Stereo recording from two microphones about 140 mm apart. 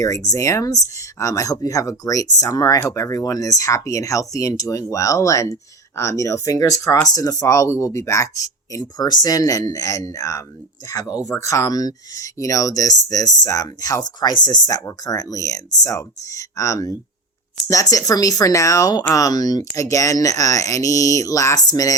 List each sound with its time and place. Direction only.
0.0 s speech: 25° left (ahead or behind)